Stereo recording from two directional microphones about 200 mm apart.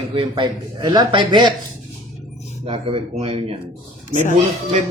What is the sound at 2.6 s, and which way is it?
Speech, 25° right (ahead or behind).